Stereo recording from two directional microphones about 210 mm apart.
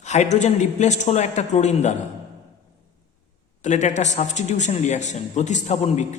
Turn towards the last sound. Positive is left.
turn(degrees=35)  # may be behind; listen again after turning